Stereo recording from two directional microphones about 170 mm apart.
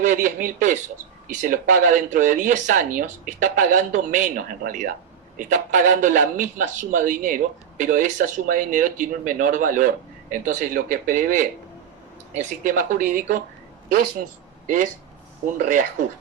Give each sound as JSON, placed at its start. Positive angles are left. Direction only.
{"t": 0.0, "sound": "a man's voice", "side_deg": -50}
{"t": 15.5, "sound": "a man's voice", "side_deg": -50}